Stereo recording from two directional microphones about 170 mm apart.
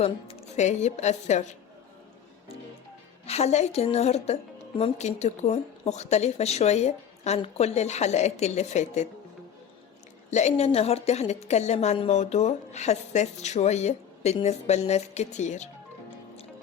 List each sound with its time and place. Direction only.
0.0 s a woman's voice: 35° left (ahead or behind)
3.2 s speech: 40° left (ahead or behind)
10.2 s speech: 40° left (ahead or behind)